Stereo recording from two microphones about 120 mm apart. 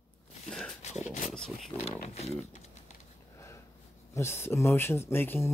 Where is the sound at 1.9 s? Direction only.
65° left (ahead or behind).